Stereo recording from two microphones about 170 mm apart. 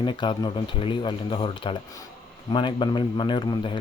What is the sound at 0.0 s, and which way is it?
A man's voice, 30° left (ahead or behind).